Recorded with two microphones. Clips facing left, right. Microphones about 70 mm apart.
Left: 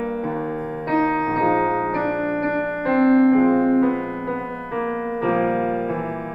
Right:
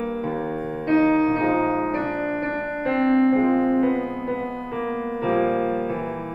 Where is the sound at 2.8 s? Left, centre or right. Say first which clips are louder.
Left 3 dB; left.